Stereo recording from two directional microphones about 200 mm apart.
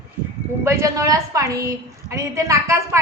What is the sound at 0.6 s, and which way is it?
A woman's voice, 15° right (ahead or behind).